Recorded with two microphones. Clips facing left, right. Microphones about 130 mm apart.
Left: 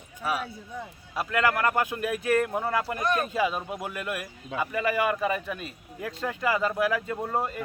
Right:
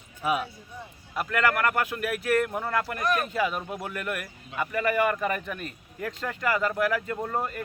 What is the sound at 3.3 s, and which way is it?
Speech, 10° left (ahead or behind).